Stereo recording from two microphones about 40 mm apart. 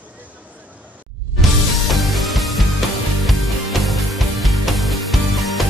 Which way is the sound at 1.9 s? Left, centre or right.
Centre.